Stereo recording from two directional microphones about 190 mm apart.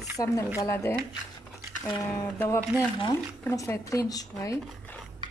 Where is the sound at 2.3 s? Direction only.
15° left (ahead or behind).